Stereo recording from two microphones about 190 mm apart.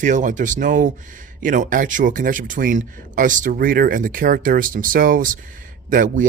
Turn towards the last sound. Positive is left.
turn(degrees=-45)  # may be behind; listen again after turning